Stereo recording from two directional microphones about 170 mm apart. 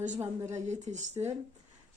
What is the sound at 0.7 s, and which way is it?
Speech, 40° right (ahead or behind).